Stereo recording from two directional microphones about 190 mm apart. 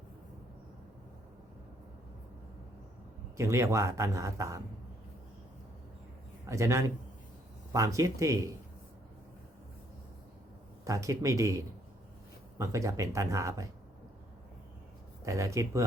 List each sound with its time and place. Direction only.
3.3 s a man's voice: 15° right (ahead or behind)
6.4 s a man's voice: 15° right (ahead or behind)
10.8 s a man's voice: 15° right (ahead or behind)
15.2 s a man's voice: 15° right (ahead or behind)